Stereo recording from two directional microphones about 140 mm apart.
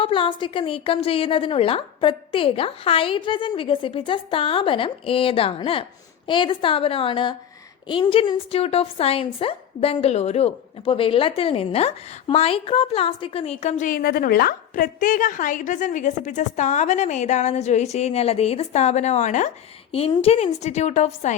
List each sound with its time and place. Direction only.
0.0 s a woman's voice: 40° left (ahead or behind); by 19.5 s 60° left (ahead or behind)
19.9 s a woman's voice: 45° left (ahead or behind)